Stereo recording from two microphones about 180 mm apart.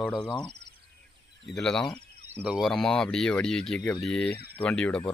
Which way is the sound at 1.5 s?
5° left (ahead or behind).